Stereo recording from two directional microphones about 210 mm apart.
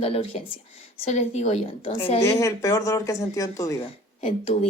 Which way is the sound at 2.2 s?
15° left (ahead or behind).